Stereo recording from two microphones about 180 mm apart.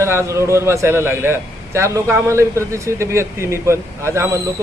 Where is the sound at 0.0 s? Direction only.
15° right (ahead or behind).